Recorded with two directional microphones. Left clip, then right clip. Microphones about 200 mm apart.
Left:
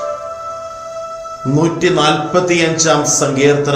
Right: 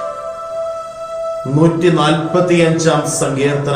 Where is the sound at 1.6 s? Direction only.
45° left (ahead or behind).